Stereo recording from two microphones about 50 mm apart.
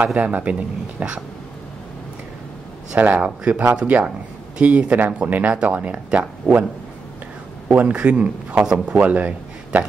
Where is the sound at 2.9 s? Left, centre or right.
Right.